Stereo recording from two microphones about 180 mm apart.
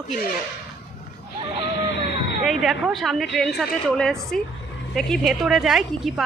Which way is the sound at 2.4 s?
Centre (ahead or behind).